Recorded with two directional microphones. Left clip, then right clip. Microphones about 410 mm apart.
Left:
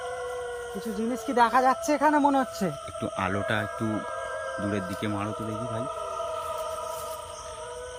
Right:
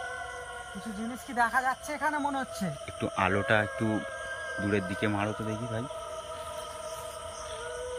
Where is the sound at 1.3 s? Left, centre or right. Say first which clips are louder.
Left 6 dB; centre.